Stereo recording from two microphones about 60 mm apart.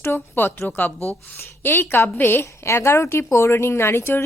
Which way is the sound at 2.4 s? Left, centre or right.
Left.